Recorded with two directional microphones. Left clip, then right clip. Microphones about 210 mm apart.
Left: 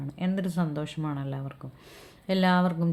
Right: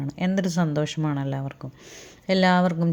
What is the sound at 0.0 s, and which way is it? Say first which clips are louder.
Speech: right 6 dB; 25° right (ahead or behind).